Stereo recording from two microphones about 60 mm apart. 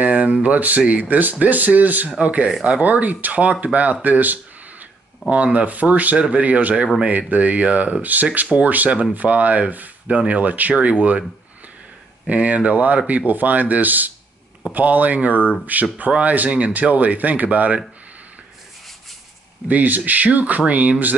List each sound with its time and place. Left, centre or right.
0.0 s speech: right
12.3 s speech: right
19.7 s speech: right